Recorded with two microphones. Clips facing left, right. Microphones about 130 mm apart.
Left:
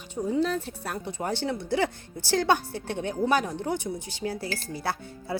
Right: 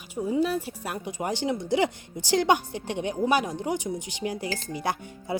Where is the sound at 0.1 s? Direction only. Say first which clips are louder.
Right 1 dB; 10° right (ahead or behind).